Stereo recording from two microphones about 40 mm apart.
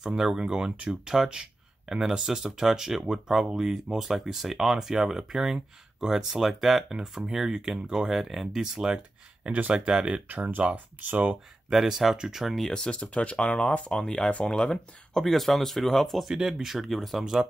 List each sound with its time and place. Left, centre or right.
0.0 s speech: centre
0.8 s speech: centre
8.1 s speech: centre
9.5 s speech: right
9.8 s speech: right
10.1 s speech: right
11.7 s speech: centre
12.4 s speech: centre
12.7 s speech: left
13.8 s speech: left
15.1 s speech: centre
16.3 s speech: centre
16.7 s speech: centre